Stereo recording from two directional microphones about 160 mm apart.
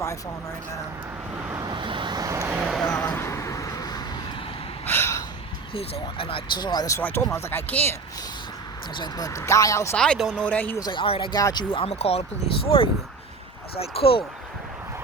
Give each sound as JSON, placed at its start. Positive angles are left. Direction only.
{"t": 1.5, "sound": "vehicle", "side_deg": -25}
{"t": 2.9, "sound": "vehicle", "side_deg": 10}
{"t": 4.9, "sound": "gasp", "side_deg": 15}
{"t": 5.7, "sound": "speech", "side_deg": 35}
{"t": 9.0, "sound": "speech", "side_deg": 25}
{"t": 9.9, "sound": "speech", "side_deg": 0}
{"t": 10.8, "sound": "speech", "side_deg": 30}